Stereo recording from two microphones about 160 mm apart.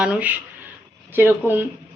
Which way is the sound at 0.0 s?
5° right (ahead or behind).